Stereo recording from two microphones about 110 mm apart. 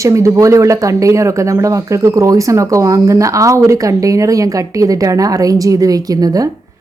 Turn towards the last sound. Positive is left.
turn(degrees=-30)  # may be behind; listen again after turning